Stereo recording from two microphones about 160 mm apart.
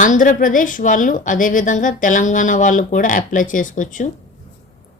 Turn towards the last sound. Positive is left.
turn(degrees=55)  # may be behind; listen again after turning